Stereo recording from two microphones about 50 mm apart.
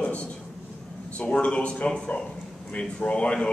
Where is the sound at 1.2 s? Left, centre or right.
Left.